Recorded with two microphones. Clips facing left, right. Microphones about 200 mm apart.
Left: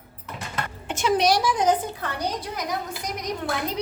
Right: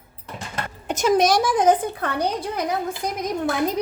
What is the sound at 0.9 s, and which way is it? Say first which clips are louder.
Speech: right 3 dB; 45° right (ahead or behind).